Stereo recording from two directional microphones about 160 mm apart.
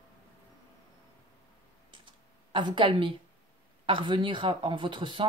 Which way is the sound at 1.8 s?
30° right (ahead or behind).